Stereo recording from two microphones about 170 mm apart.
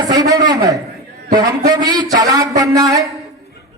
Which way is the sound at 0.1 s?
20° right (ahead or behind).